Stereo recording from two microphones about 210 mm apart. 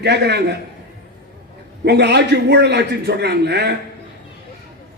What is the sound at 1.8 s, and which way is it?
A man's voice, 50° right (ahead or behind).